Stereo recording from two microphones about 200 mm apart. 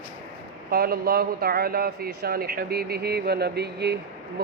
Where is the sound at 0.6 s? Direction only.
50° right (ahead or behind).